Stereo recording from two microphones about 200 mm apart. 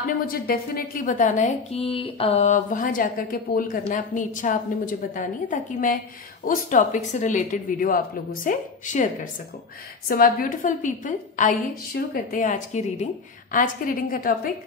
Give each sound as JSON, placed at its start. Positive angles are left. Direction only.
{"t": 0.3, "sound": "a woman's voice", "side_deg": 50}